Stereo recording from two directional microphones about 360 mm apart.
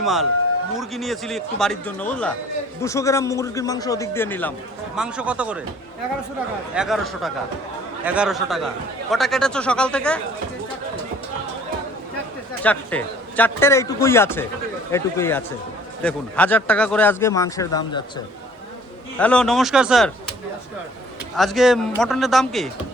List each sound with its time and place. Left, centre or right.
0.0 s a man's voice: centre
6.7 s a man's voice: centre
12.6 s a man's voice: centre
19.2 s a man's voice: centre
21.3 s a man's voice: centre